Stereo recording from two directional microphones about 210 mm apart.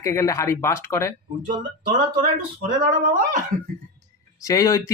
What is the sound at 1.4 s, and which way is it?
Speech, 40° right (ahead or behind).